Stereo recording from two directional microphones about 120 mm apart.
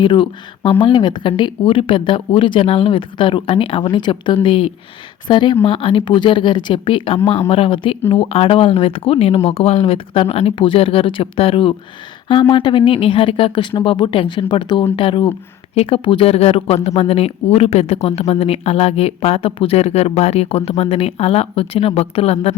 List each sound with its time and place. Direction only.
0.0 s speech: 45° left (ahead or behind)